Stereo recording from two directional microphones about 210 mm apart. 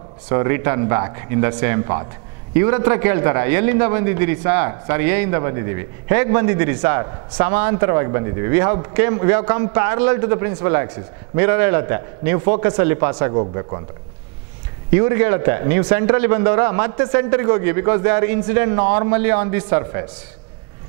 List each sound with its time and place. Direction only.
0.3 s a man's voice: 15° right (ahead or behind)
13.3 s speech: 25° right (ahead or behind)
15.0 s a man's voice: 15° right (ahead or behind)